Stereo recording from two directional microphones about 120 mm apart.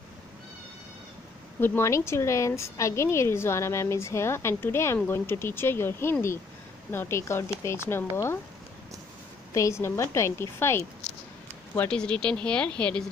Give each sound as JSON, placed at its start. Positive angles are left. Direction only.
{"t": 1.6, "sound": "a woman's voice", "side_deg": 25}
{"t": 9.5, "sound": "a woman's voice", "side_deg": 25}
{"t": 11.9, "sound": "a woman's voice", "side_deg": 5}